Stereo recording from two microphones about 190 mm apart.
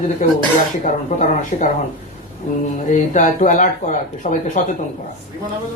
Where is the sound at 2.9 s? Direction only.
45° left (ahead or behind).